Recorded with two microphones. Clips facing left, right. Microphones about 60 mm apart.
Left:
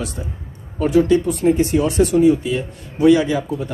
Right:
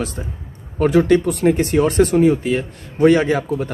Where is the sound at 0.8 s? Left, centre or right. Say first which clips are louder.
Right 1 dB; right.